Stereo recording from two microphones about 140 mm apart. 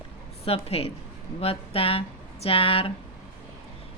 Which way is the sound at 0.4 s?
45° left (ahead or behind).